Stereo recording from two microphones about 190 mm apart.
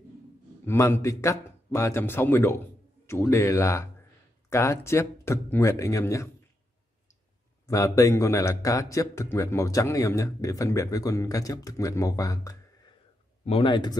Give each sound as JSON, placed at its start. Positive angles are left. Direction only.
{"t": 0.7, "sound": "a man's voice", "side_deg": 15}
{"t": 7.6, "sound": "a man's voice", "side_deg": 15}